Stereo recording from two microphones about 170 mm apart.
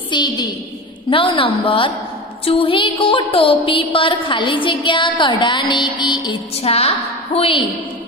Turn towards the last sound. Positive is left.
turn(degrees=35)  # may be behind; listen again after turning